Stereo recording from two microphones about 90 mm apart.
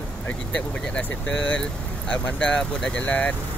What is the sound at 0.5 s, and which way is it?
Speech, 10° left (ahead or behind).